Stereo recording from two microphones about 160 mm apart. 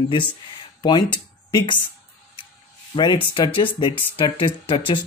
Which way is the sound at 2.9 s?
30° left (ahead or behind).